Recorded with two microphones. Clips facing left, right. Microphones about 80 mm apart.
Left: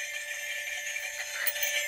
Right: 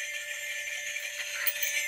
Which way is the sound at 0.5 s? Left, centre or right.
Left.